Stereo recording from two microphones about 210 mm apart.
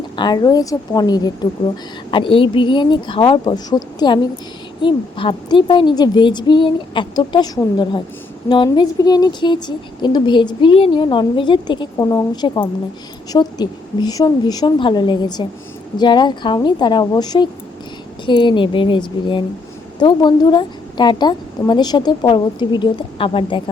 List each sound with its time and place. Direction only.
0.2 s speech: 20° left (ahead or behind)